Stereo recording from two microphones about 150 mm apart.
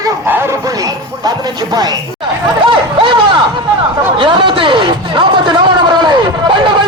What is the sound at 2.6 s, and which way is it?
Vehicle, 35° right (ahead or behind).